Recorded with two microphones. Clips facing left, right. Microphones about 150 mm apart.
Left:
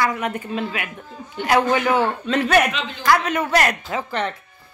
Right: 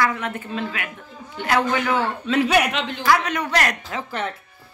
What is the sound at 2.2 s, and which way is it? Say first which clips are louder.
A man's voice: right 2 dB; 5° right (ahead or behind).